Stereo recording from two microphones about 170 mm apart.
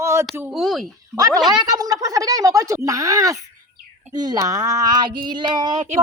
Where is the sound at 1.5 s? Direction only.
25° right (ahead or behind).